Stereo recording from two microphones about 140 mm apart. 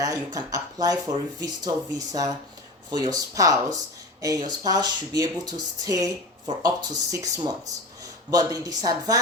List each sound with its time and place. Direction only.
0.0 s speech: 25° right (ahead or behind)